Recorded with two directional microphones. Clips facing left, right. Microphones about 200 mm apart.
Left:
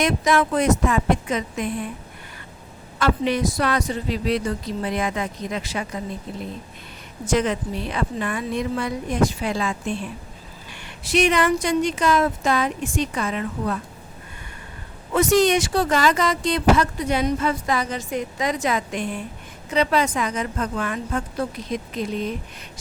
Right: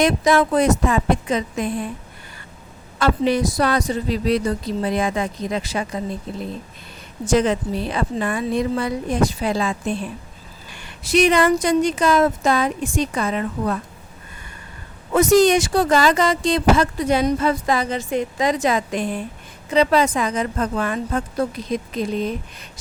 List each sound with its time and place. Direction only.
0.0 s speech: 35° right (ahead or behind)
3.0 s speech: 35° right (ahead or behind)
7.3 s speech: 35° right (ahead or behind)
11.0 s speech: 40° right (ahead or behind)
15.1 s speech: 40° right (ahead or behind)